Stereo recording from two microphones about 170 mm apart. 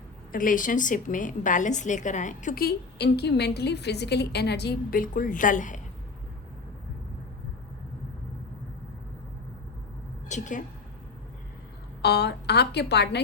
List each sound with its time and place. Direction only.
0.3 s a woman's voice: 50° left (ahead or behind)
10.2 s a woman's voice: 45° left (ahead or behind)
12.0 s a woman's voice: 75° left (ahead or behind)